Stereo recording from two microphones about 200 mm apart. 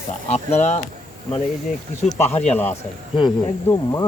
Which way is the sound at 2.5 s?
10° left (ahead or behind).